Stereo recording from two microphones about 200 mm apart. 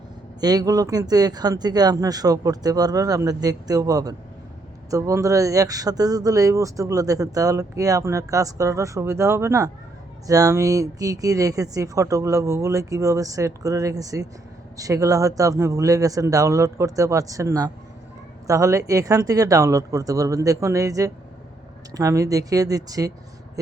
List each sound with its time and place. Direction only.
0.3 s speech: 20° right (ahead or behind)